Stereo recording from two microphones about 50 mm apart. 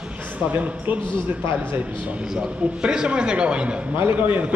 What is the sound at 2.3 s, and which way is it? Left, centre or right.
A man's voice, centre.